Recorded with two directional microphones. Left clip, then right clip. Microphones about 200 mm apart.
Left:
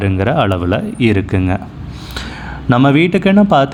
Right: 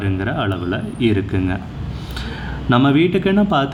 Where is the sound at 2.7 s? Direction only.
30° left (ahead or behind).